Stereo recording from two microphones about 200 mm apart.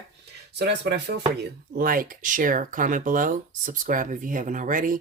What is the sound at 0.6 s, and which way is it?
Speech, 60° right (ahead or behind).